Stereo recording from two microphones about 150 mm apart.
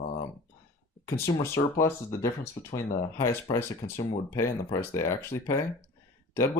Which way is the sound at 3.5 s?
20° left (ahead or behind).